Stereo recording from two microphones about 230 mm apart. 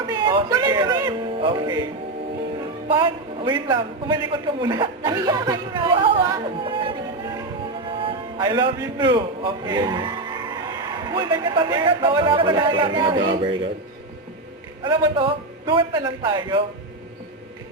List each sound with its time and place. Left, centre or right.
0.1 s music: centre
2.6 s a woman's voice: right
14.8 s a woman's voice: right